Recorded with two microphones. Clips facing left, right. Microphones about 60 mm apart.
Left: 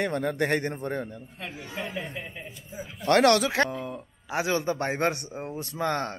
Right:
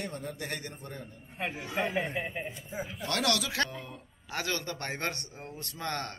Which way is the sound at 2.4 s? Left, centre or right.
Right.